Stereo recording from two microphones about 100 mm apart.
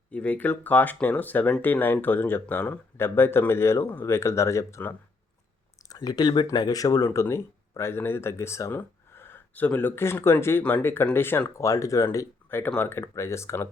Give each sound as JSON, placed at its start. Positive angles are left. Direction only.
{"t": 0.1, "sound": "speech", "side_deg": 15}
{"t": 5.9, "sound": "speech", "side_deg": 40}